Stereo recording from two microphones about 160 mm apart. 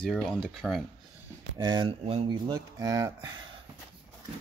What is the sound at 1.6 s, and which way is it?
Speech, 25° right (ahead or behind).